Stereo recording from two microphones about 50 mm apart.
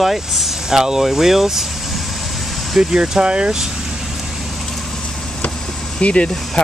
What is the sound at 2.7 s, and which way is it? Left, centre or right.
Speech, centre.